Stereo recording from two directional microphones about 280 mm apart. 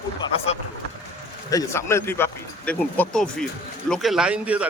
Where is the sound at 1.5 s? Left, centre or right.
Centre.